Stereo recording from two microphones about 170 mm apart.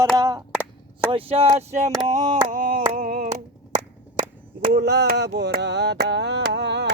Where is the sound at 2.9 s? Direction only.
60° right (ahead or behind).